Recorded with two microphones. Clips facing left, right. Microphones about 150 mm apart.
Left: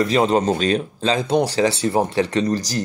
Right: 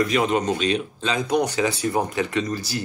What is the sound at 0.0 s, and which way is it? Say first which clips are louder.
Speech: left 4 dB; 30° left (ahead or behind).